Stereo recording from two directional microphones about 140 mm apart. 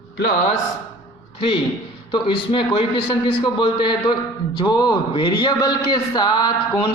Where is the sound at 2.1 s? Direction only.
35° left (ahead or behind).